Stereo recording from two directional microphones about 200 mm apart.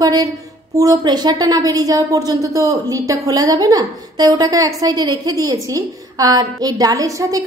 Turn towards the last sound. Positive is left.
turn(degrees=-15)  # may be behind; listen again after turning